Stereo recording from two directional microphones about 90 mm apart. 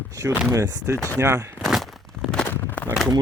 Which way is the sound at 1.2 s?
30° right (ahead or behind).